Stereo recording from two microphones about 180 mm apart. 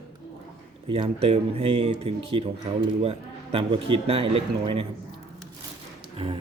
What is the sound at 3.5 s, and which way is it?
Speech, 30° right (ahead or behind).